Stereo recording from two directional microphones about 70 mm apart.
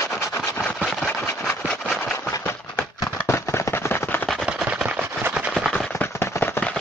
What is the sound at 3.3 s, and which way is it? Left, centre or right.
Machine gun, left.